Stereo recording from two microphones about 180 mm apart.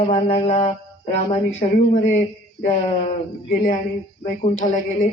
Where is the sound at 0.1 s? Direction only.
35° left (ahead or behind).